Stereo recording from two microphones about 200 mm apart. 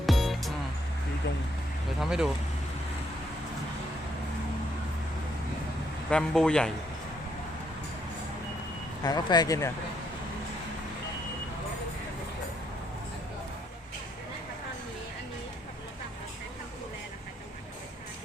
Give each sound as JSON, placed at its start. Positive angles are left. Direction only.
{"t": 0.0, "sound": "music", "side_deg": 0}
{"t": 2.0, "sound": "a man's voice", "side_deg": -5}
{"t": 6.1, "sound": "a man's voice", "side_deg": 5}
{"t": 9.0, "sound": "speech", "side_deg": 20}